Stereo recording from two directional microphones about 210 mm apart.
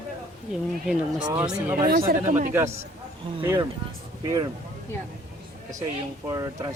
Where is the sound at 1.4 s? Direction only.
5° right (ahead or behind).